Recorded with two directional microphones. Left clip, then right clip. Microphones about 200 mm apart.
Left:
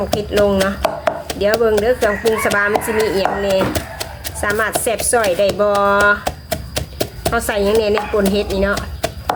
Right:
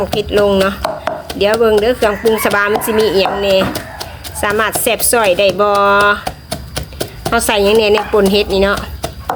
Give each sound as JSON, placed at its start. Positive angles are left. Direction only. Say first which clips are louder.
{"t": 0.2, "sound": "speech", "louder": "right 4 dB", "side_deg": -30}
{"t": 0.8, "sound": "chopping", "louder": "even", "side_deg": 5}
{"t": 1.4, "sound": "speech", "louder": "right 5 dB", "side_deg": -30}
{"t": 3.7, "sound": "typewriter", "louder": "even", "side_deg": 5}
{"t": 4.4, "sound": "speech", "louder": "right 3 dB", "side_deg": -30}
{"t": 6.2, "sound": "a sound", "louder": "left 1 dB", "side_deg": 5}
{"t": 7.3, "sound": "speech", "louder": "right 5 dB", "side_deg": -30}